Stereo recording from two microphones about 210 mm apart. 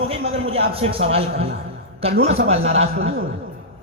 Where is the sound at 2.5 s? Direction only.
30° right (ahead or behind).